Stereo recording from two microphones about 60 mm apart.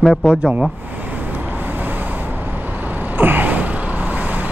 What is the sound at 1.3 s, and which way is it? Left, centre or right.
Vehicle, right.